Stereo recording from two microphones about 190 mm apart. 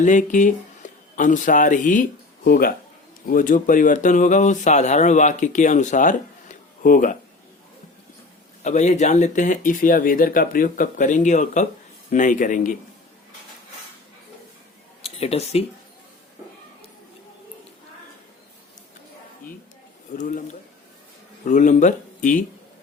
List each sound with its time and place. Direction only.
0.0 s speech: 40° left (ahead or behind)
8.6 s speech: 40° left (ahead or behind)
15.0 s speech: 30° left (ahead or behind)
20.1 s speech: 40° left (ahead or behind)